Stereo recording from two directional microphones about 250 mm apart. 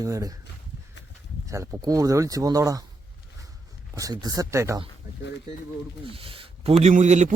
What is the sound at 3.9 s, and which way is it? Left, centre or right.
Speech, centre.